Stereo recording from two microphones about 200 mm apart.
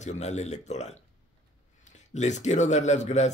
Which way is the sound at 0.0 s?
35° left (ahead or behind).